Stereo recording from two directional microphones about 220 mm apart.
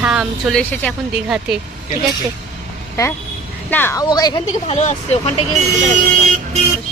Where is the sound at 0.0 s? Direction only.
5° right (ahead or behind).